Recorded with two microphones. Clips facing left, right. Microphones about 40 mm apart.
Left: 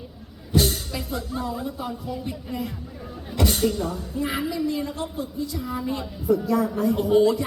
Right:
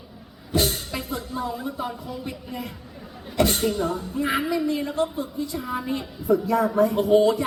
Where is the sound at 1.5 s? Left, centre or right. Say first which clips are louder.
Even; right.